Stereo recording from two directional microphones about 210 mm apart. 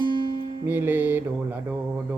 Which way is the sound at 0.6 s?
10° right (ahead or behind).